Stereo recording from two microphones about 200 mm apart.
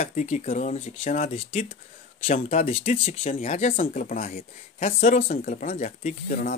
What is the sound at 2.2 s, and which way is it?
Speech, 45° left (ahead or behind).